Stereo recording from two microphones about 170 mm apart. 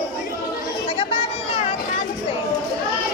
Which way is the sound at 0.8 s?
30° left (ahead or behind).